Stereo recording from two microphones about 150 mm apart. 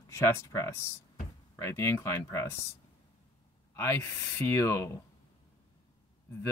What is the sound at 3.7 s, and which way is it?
Speech, 15° left (ahead or behind).